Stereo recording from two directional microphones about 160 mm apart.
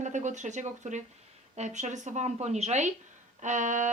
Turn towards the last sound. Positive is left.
turn(degrees=-50)  # may be behind; listen again after turning